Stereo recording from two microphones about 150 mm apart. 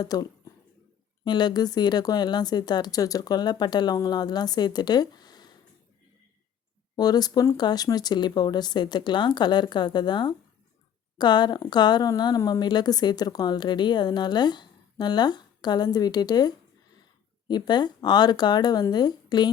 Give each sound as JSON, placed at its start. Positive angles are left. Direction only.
{"t": 0.0, "sound": "a woman's voice", "side_deg": 25}
{"t": 6.9, "sound": "a woman's voice", "side_deg": 25}